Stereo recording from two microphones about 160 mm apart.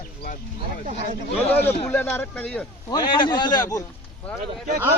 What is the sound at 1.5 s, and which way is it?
Speech, 10° left (ahead or behind).